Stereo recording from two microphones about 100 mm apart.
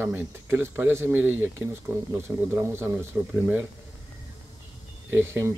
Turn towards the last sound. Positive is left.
turn(degrees=-20)  # may be behind; listen again after turning